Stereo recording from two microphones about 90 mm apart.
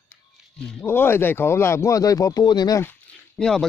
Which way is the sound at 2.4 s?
50° left (ahead or behind).